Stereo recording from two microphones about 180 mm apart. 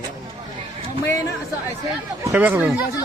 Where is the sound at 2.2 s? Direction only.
10° right (ahead or behind).